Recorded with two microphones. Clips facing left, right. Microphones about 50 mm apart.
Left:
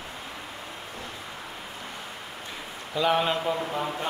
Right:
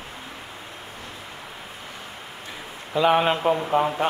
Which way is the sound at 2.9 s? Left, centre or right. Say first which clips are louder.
Right 5 dB; right.